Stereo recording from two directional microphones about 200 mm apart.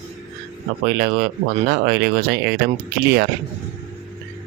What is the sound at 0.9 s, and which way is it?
Speech, 50° right (ahead or behind).